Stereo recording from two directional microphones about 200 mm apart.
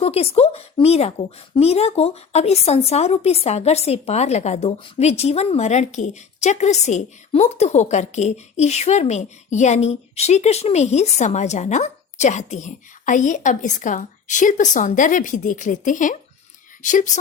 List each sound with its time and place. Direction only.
0.0 s a woman's voice: 30° left (ahead or behind)